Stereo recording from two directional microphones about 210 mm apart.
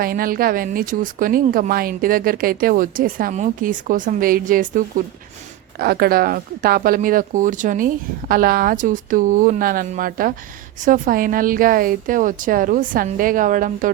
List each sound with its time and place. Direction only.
0.0 s speech: 45° right (ahead or behind)